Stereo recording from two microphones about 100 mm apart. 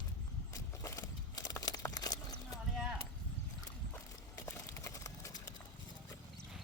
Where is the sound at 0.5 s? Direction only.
30° left (ahead or behind).